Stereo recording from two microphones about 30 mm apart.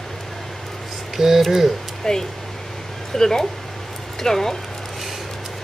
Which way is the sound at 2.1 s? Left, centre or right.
Centre.